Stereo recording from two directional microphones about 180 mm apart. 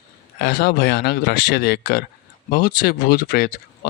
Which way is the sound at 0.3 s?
60° left (ahead or behind).